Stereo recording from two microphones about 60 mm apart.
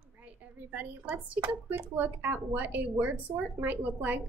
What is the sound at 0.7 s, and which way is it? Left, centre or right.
Speech, right.